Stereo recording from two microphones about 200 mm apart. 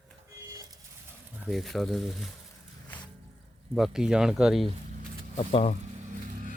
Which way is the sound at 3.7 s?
Centre (ahead or behind).